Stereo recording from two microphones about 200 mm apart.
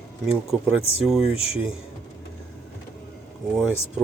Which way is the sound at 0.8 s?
30° left (ahead or behind).